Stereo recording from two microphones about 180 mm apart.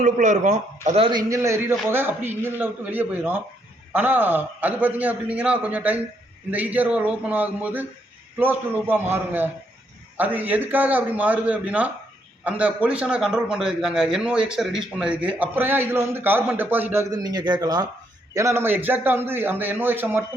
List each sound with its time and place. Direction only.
0.0 s a man's voice: 45° right (ahead or behind)
1.3 s a man's voice: 15° right (ahead or behind)